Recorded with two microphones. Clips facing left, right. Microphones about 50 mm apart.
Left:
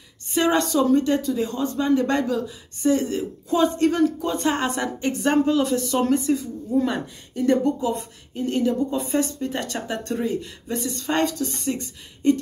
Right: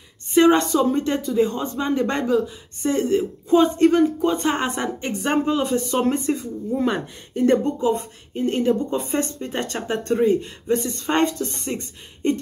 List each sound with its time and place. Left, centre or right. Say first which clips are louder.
0.3 s a woman's voice: right 5 dB; right